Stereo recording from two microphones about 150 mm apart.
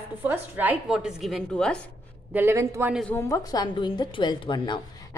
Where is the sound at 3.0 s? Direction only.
20° left (ahead or behind).